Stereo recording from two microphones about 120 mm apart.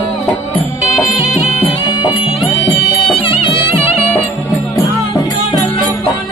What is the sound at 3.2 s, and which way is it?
Music, 50° left (ahead or behind).